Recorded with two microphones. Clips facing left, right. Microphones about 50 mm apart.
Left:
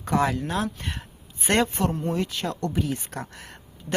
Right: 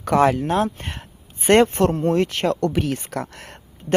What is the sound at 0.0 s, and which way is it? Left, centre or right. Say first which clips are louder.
Speech: right 7 dB; right.